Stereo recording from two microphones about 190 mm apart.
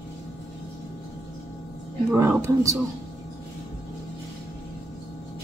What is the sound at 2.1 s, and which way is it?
Speech, 15° right (ahead or behind).